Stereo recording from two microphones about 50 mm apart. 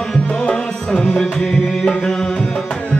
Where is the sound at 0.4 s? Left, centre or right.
Centre.